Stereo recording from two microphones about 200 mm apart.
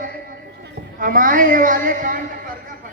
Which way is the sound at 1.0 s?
45° right (ahead or behind).